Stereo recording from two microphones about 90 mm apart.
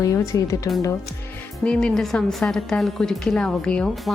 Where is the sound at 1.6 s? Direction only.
5° left (ahead or behind).